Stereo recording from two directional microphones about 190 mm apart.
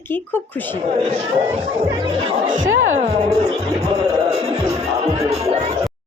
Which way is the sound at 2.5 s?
45° right (ahead or behind).